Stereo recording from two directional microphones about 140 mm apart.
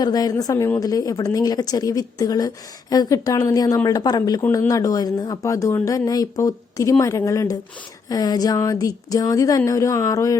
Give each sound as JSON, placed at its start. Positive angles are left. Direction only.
{"t": 0.0, "sound": "speech", "side_deg": 25}